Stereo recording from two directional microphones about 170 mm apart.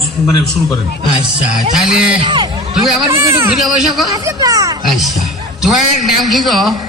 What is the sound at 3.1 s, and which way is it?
Speech, 15° right (ahead or behind).